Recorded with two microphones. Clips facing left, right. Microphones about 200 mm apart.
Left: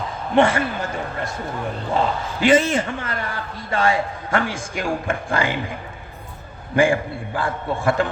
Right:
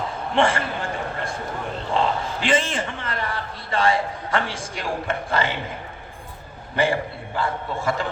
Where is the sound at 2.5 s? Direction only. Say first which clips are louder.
Left 7 dB; 45° left (ahead or behind).